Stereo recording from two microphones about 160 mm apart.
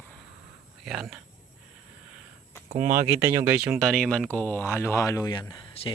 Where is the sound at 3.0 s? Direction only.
15° right (ahead or behind).